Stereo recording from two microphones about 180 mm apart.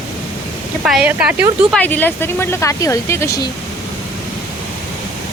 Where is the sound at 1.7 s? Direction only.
10° left (ahead or behind).